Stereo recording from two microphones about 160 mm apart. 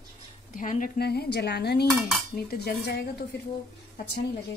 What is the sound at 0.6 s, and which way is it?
A woman's voice, 55° left (ahead or behind).